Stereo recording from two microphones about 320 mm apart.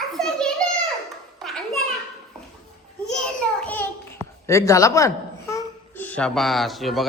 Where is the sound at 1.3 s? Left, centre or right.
Centre.